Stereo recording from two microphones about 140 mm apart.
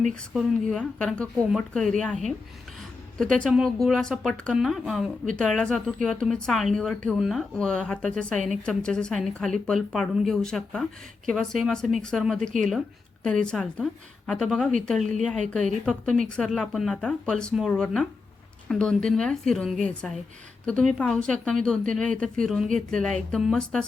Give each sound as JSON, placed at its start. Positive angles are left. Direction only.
{"t": 0.3, "sound": "speech", "side_deg": 5}